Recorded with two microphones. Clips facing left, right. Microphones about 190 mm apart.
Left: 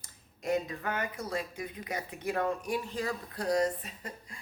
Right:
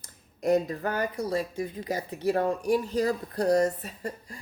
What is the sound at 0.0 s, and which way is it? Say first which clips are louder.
Speech: right 9 dB; 40° right (ahead or behind).